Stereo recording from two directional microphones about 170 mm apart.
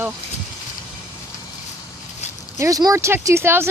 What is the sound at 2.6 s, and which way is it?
Speech, 20° right (ahead or behind).